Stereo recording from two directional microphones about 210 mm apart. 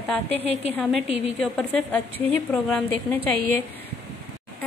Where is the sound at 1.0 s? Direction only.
30° left (ahead or behind).